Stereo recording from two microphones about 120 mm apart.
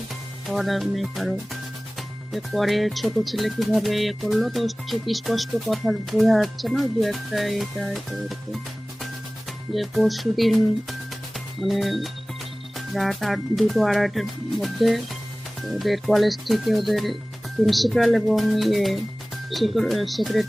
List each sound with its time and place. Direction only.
0.4 s speech: centre (ahead or behind)